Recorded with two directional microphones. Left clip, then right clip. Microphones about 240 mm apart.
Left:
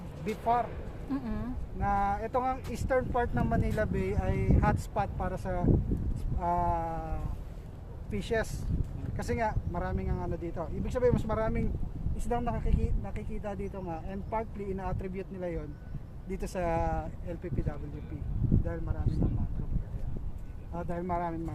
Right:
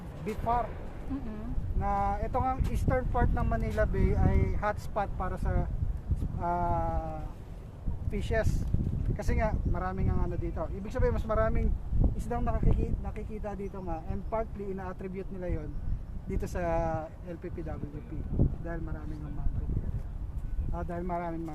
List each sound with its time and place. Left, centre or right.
0.3 s speech: centre
1.1 s speech: left
1.8 s speech: centre
20.7 s speech: centre